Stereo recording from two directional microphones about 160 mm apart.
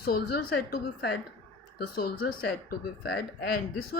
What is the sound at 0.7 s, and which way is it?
Speech, 90° left.